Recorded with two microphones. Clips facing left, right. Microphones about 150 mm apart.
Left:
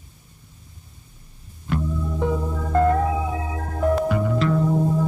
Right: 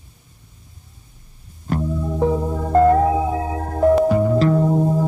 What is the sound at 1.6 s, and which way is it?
Music, 40° right (ahead or behind).